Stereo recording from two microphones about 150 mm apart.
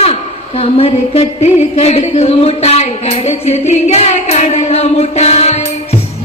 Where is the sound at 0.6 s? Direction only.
40° left (ahead or behind).